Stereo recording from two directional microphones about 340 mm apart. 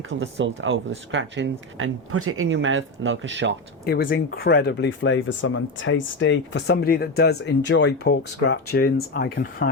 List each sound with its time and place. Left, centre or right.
0.1 s speech: right
3.8 s speech: left